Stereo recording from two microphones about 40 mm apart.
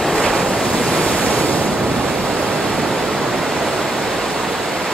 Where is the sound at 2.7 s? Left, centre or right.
Centre.